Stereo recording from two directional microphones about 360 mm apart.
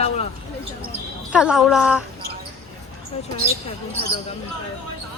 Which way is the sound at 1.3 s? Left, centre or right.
Centre.